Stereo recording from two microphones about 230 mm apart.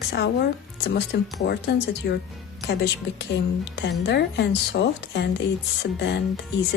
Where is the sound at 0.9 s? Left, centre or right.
Left.